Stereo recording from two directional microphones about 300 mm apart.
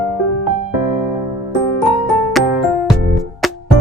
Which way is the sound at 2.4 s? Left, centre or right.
Centre.